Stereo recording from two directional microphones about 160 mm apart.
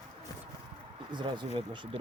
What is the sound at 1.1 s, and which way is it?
Speech, 30° right (ahead or behind).